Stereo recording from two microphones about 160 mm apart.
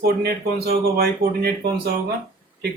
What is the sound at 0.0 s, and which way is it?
Speech, 80° right.